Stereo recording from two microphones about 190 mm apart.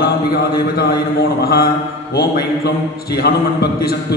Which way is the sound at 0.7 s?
55° left (ahead or behind).